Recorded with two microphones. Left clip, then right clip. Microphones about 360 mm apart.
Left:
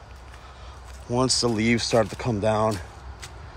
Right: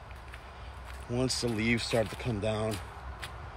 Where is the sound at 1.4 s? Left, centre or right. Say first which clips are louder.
Left 7 dB; left.